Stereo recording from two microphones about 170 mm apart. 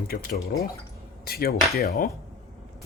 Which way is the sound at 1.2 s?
65° left (ahead or behind).